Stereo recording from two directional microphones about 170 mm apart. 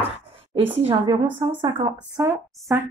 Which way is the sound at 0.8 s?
35° right (ahead or behind).